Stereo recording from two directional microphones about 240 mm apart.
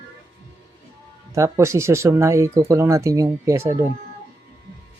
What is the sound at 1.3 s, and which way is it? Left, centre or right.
Speech, centre.